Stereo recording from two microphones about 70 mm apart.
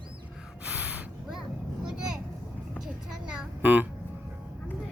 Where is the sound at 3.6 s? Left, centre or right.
Right.